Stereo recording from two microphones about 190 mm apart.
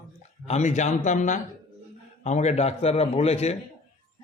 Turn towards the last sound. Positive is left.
turn(degrees=35)  # may be behind; listen again after turning